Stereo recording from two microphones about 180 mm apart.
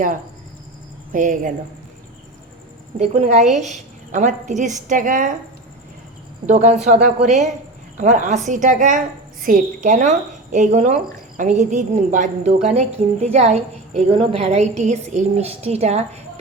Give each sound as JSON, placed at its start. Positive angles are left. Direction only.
{"t": 1.1, "sound": "a woman's voice", "side_deg": -45}
{"t": 3.0, "sound": "a woman's voice", "side_deg": -40}
{"t": 6.4, "sound": "a woman's voice", "side_deg": -40}